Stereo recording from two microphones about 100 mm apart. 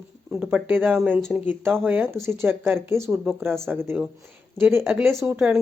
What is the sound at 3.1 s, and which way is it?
Speech, 15° right (ahead or behind).